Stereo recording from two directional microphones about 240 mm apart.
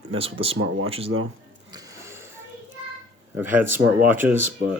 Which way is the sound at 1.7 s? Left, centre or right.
Centre.